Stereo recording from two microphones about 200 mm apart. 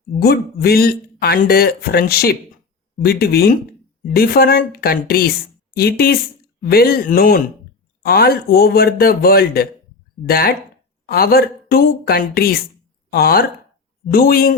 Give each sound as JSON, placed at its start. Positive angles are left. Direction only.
{"t": 0.2, "sound": "speech", "side_deg": 50}